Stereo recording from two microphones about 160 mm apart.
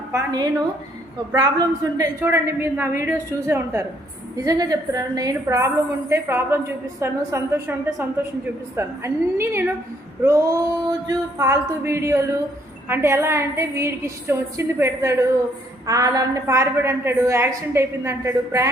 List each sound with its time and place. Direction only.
0.1 s a woman's voice: 20° right (ahead or behind)
2.2 s a woman's voice: 15° right (ahead or behind)